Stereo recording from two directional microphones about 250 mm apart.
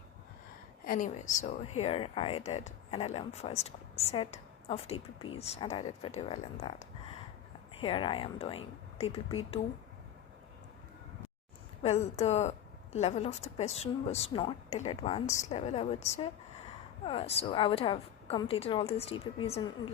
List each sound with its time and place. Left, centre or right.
0.9 s speech: left
11.8 s speech: left